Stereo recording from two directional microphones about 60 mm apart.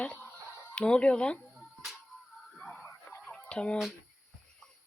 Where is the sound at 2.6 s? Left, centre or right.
Centre.